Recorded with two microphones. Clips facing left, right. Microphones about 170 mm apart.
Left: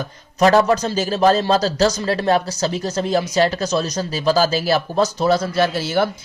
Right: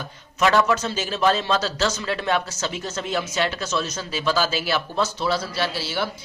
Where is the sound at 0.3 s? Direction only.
40° left (ahead or behind).